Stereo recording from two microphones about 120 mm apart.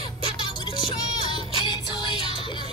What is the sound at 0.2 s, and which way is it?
Music, 40° left (ahead or behind).